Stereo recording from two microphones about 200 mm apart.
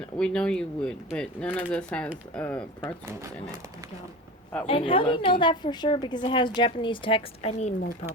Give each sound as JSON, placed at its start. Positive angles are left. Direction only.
{"t": 0.2, "sound": "speech", "side_deg": 5}
{"t": 4.6, "sound": "a woman's voice", "side_deg": 25}